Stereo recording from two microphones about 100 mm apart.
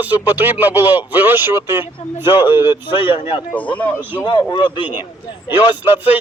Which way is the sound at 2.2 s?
50° left (ahead or behind).